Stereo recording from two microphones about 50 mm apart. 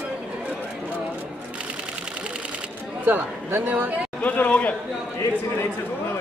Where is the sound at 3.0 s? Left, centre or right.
Right.